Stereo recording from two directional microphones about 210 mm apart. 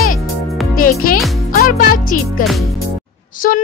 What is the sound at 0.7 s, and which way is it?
Music, 40° left (ahead or behind).